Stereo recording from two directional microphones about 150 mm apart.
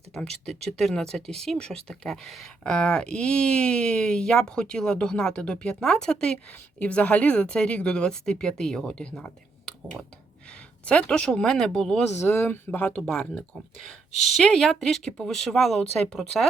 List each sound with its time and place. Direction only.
0.1 s speech: 5° left (ahead or behind)